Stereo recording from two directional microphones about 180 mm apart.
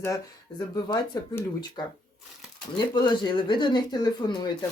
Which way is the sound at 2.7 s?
25° left (ahead or behind).